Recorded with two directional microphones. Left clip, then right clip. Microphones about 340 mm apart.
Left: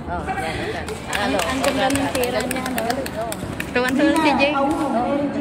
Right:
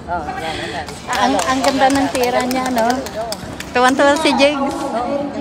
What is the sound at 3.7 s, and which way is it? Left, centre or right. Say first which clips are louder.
Speech: right 6 dB; centre.